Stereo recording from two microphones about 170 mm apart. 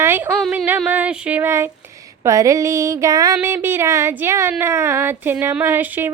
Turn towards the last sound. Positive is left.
turn(degrees=-10)  # may be behind; listen again after turning